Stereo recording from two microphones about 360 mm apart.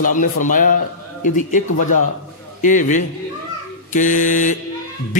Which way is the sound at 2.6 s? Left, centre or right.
Left.